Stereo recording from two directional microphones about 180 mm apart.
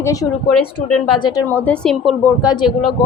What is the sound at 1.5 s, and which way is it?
Speech, 10° left (ahead or behind).